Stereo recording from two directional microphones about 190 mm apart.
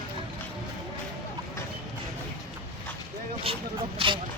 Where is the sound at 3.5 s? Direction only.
30° right (ahead or behind).